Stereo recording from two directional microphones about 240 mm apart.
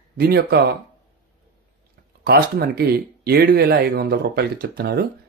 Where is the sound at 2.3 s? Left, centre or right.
Right.